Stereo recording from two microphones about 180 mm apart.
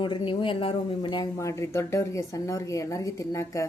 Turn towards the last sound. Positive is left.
turn(degrees=15)  # may be behind; listen again after turning